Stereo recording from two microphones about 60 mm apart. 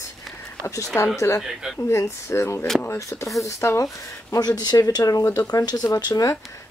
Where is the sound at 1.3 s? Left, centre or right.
Left.